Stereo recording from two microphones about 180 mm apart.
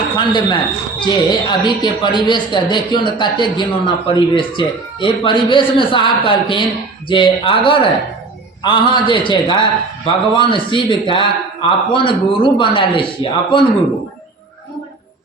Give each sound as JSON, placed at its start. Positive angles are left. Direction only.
{"t": 0.2, "sound": "speech", "side_deg": 25}